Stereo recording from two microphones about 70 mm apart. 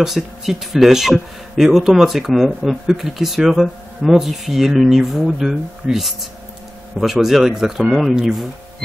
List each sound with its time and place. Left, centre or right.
0.0 s speech: centre